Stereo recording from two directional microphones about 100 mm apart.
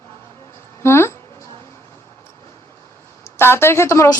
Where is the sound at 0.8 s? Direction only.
25° left (ahead or behind).